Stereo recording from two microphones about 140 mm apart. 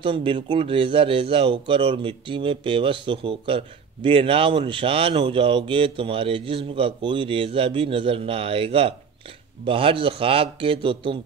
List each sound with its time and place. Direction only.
0.0 s a man's voice: 40° right (ahead or behind)